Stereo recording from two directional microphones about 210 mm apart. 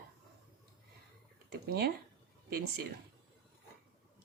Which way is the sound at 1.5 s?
50° right (ahead or behind).